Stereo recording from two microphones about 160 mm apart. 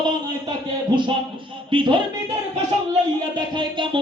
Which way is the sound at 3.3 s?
30° right (ahead or behind).